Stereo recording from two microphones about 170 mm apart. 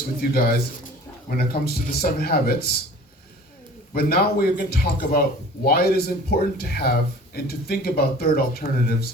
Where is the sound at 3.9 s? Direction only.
65° left (ahead or behind).